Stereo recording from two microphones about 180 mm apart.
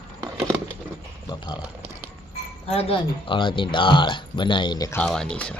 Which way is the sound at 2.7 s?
30° left (ahead or behind).